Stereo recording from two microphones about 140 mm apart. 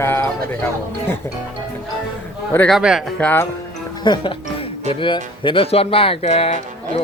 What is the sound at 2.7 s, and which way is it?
Speech, 5° right (ahead or behind).